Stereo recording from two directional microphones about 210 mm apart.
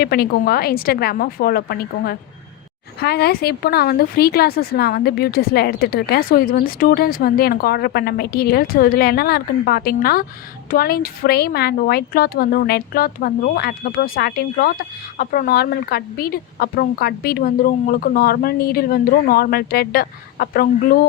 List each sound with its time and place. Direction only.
0.0 s speech: 50° left (ahead or behind)